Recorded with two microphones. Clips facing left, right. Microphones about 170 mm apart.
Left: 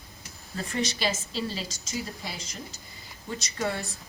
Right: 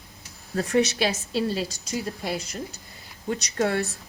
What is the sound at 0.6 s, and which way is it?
A woman's voice, 70° right (ahead or behind).